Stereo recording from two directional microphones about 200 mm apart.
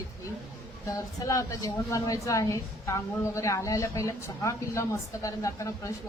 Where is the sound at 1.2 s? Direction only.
15° left (ahead or behind).